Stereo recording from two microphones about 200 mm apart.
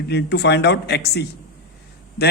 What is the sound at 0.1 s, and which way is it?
A man's voice, 55° left (ahead or behind).